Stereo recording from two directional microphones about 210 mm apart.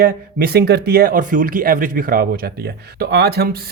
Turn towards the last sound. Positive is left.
turn(degrees=-50)  # may be behind; listen again after turning